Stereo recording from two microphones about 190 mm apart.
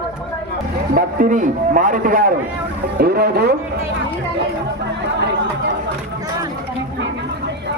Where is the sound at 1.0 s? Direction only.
45° right (ahead or behind).